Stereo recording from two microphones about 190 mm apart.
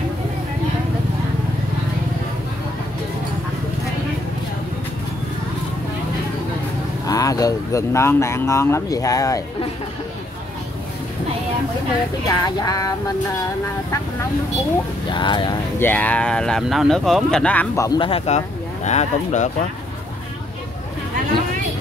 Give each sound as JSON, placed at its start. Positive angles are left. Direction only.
{"t": 7.1, "sound": "speech", "side_deg": 20}
{"t": 12.3, "sound": "music", "side_deg": 20}
{"t": 15.0, "sound": "music", "side_deg": 25}
{"t": 15.8, "sound": "speech", "side_deg": 10}
{"t": 17.8, "sound": "music", "side_deg": 25}
{"t": 18.9, "sound": "speech", "side_deg": 40}